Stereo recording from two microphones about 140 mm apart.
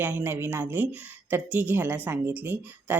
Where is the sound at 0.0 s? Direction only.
15° right (ahead or behind).